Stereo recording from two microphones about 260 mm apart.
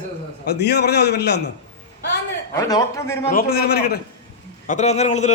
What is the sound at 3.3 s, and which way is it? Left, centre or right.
Speech, left.